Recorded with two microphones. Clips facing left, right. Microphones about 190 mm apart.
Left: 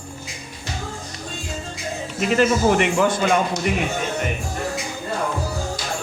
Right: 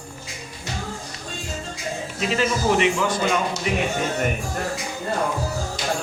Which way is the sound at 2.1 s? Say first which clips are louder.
Left 5 dB; 55° left (ahead or behind).